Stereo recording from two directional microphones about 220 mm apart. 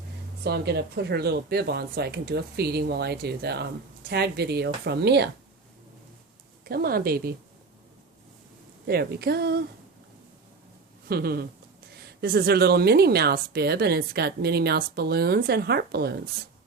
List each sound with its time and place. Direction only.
0.4 s a woman's voice: 50° right (ahead or behind)
6.7 s a woman's voice: 45° right (ahead or behind)
8.9 s a woman's voice: 45° right (ahead or behind)
11.1 s a woman's voice: 45° right (ahead or behind)